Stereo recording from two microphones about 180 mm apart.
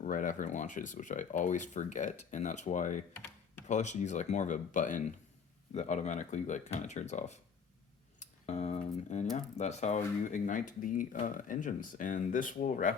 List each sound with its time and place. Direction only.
0.0 s speech: 45° left (ahead or behind)